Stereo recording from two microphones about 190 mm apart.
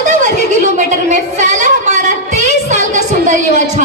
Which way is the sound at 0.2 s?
40° right (ahead or behind).